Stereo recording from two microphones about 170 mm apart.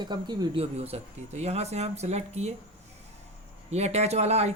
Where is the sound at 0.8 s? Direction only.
40° right (ahead or behind).